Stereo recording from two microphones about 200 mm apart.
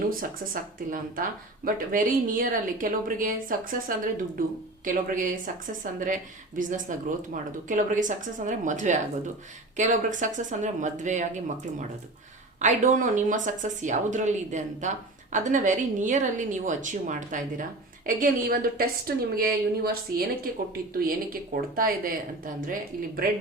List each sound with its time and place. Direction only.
0.1 s a woman's voice: 45° right (ahead or behind)